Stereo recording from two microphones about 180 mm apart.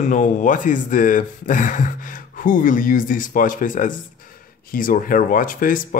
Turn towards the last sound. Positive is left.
turn(degrees=50)  # may be behind; listen again after turning